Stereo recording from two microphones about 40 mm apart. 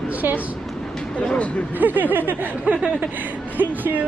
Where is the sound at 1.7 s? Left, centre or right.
Right.